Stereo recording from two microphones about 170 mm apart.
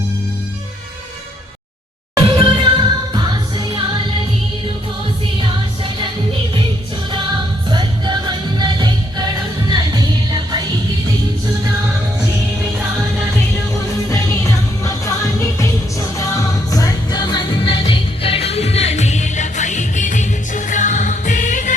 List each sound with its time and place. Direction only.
2.1 s music: 25° right (ahead or behind)
5.4 s music: 30° right (ahead or behind)
7.7 s music: 25° right (ahead or behind)
14.1 s music: 20° left (ahead or behind)
16.1 s music: 20° left (ahead or behind); by 21.8 s 45° left (ahead or behind)